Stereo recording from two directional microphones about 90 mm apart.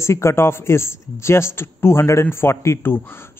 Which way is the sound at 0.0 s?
30° left (ahead or behind).